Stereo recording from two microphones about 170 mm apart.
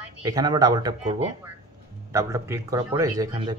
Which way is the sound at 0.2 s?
25° right (ahead or behind).